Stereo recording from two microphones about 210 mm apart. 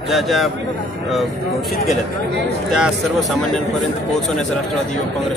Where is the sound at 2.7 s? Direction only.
5° right (ahead or behind).